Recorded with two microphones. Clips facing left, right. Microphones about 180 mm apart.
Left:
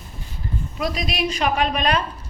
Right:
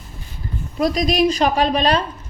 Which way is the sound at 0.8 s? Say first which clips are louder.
Right 8 dB; 40° right (ahead or behind).